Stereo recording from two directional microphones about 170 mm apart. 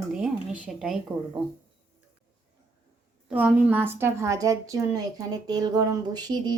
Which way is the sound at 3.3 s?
10° right (ahead or behind).